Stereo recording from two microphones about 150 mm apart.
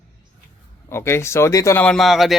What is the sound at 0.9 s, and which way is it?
Speech, 15° left (ahead or behind).